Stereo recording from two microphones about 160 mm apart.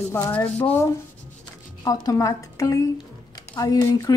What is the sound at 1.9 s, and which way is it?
A woman's voice, 20° left (ahead or behind).